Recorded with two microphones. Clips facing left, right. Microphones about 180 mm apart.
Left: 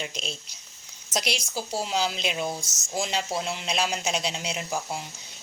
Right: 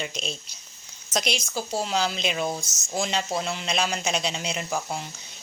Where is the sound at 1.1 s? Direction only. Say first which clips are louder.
Right 2 dB; 10° left (ahead or behind).